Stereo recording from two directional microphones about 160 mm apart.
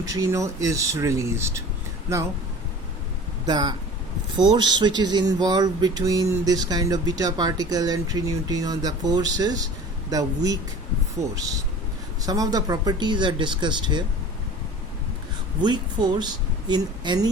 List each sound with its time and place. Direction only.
0.0 s speech: 20° right (ahead or behind)
3.4 s speech: 25° right (ahead or behind)
12.2 s speech: 25° right (ahead or behind)
15.6 s speech: 25° right (ahead or behind)